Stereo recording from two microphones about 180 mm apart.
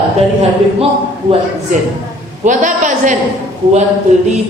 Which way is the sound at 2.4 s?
45° right (ahead or behind).